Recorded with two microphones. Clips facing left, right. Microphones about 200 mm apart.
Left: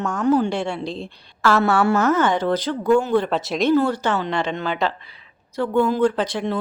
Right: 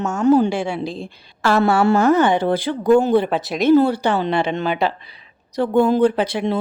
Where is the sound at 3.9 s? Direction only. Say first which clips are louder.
Right 3 dB; 10° right (ahead or behind).